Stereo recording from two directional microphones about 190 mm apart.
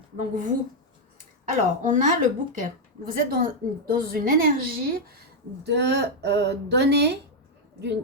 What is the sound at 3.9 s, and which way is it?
A woman's voice, 50° right (ahead or behind).